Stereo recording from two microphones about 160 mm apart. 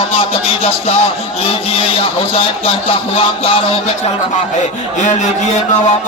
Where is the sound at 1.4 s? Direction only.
35° left (ahead or behind).